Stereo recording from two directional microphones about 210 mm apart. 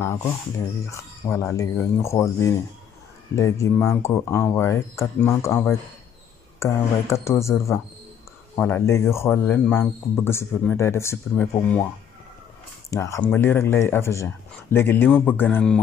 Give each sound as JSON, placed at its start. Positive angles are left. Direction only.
{"t": 0.0, "sound": "speech", "side_deg": 10}
{"t": 8.5, "sound": "speech", "side_deg": 10}
{"t": 12.9, "sound": "speech", "side_deg": 15}